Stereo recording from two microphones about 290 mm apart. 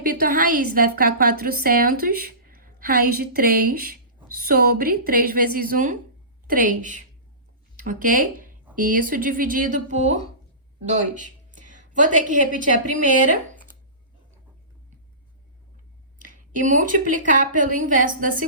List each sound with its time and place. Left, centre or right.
0.0 s a woman's voice: right
16.1 s a woman's voice: right